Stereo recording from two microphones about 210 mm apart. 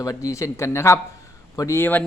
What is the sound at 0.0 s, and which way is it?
Speech, 15° left (ahead or behind).